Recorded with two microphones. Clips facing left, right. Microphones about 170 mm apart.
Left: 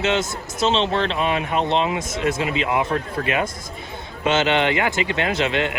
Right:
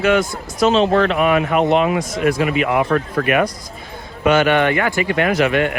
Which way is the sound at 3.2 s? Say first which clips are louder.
Right 6 dB; 25° left (ahead or behind).